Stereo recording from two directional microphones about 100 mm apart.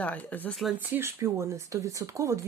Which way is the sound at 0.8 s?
20° right (ahead or behind).